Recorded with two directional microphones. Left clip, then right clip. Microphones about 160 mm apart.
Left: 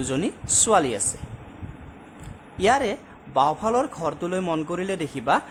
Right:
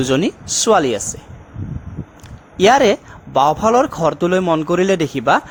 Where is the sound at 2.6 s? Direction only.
50° right (ahead or behind).